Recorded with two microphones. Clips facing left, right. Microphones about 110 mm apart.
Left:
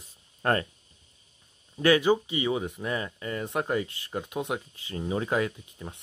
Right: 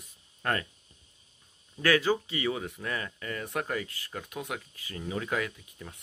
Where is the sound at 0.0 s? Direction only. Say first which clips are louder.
Left 5 dB; 35° left (ahead or behind).